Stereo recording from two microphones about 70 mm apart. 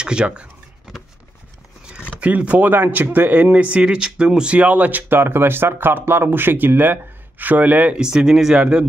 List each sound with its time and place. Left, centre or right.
0.0 s speech: centre
2.0 s speech: centre
3.7 s speech: centre
8.0 s speech: centre